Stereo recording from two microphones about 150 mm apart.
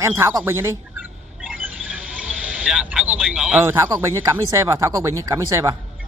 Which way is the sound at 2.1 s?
10° right (ahead or behind).